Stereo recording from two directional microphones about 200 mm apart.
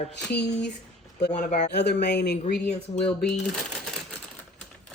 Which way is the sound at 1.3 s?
40° left (ahead or behind).